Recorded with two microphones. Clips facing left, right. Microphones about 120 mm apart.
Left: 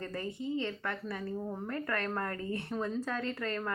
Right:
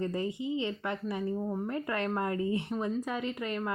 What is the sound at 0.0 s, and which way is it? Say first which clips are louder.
A woman's voice: right 5 dB; 15° right (ahead or behind).